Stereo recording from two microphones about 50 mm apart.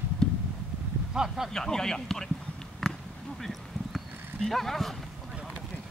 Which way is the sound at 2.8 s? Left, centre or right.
Centre.